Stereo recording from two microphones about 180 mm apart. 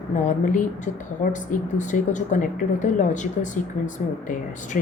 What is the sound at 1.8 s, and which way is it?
Speech, 45° left (ahead or behind).